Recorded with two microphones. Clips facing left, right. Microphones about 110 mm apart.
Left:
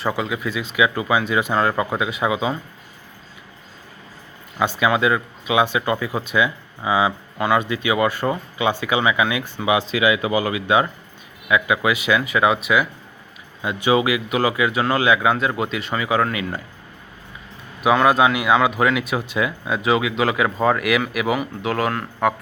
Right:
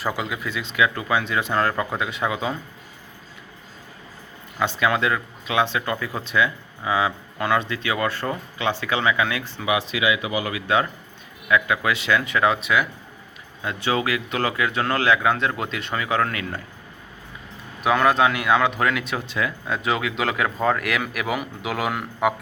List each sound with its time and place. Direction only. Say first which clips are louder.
0.0 s speech: left 3 dB; centre (ahead or behind)
4.6 s speech: left 3 dB; 10° left (ahead or behind)
9.6 s speech: left 4 dB; 30° left (ahead or behind)
10.5 s speech: left 3 dB; 15° left (ahead or behind)
17.8 s speech: left 3 dB; 5° left (ahead or behind)